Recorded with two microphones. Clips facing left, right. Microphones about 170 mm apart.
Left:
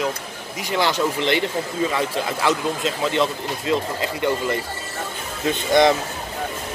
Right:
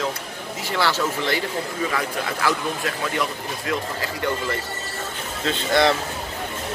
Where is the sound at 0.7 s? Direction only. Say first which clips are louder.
Left 2 dB; 20° left (ahead or behind).